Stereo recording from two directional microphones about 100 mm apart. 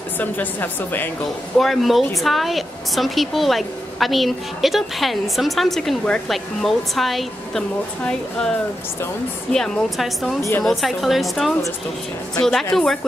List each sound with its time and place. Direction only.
0.2 s a woman's voice: 20° left (ahead or behind)
1.6 s a woman's voice: centre (ahead or behind)